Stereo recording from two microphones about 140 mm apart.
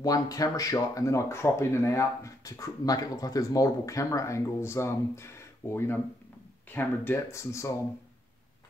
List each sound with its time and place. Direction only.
0.0 s speech: 25° left (ahead or behind)